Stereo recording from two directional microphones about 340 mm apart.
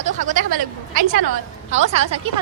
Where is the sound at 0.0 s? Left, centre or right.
Right.